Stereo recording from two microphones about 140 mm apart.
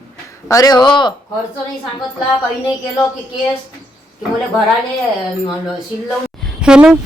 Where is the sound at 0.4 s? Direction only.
25° left (ahead or behind).